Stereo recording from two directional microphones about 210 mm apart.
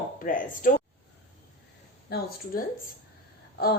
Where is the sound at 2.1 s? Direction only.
50° left (ahead or behind).